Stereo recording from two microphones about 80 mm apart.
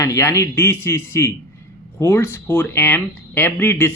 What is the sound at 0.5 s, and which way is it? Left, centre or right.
Speech, left.